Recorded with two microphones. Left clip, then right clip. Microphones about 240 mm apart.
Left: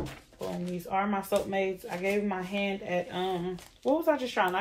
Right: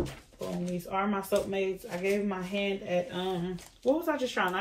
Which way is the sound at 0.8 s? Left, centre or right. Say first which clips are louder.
Left 2 dB; left.